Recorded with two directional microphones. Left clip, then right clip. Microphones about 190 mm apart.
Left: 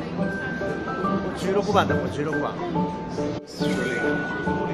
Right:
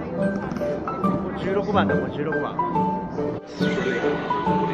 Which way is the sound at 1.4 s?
55° left (ahead or behind).